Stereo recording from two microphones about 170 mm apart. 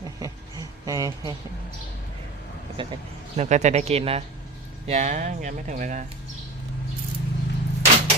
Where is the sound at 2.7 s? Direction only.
35° right (ahead or behind).